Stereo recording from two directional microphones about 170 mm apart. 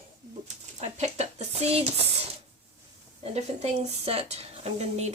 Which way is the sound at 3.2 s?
35° right (ahead or behind).